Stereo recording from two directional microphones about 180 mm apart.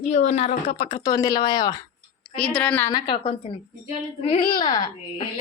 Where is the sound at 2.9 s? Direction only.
25° left (ahead or behind).